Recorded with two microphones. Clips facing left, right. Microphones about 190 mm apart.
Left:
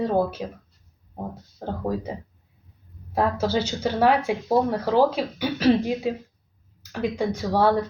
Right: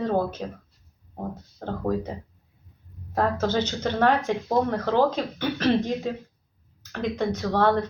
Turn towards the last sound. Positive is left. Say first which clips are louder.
# left 1 dB
turn(degrees=10)  # may be behind; listen again after turning